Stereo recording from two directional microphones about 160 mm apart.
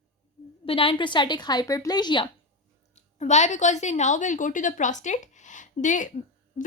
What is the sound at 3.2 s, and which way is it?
A woman's voice, 45° left (ahead or behind).